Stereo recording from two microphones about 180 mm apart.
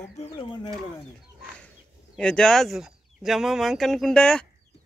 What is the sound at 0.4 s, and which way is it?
Speech, 25° left (ahead or behind).